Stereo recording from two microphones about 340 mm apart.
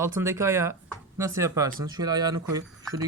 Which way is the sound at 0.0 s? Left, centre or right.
Centre.